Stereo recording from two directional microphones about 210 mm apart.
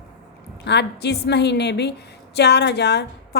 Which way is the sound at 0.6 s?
55° left (ahead or behind).